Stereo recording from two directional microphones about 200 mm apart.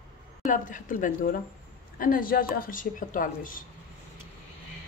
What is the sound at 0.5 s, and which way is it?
Speech, 40° left (ahead or behind).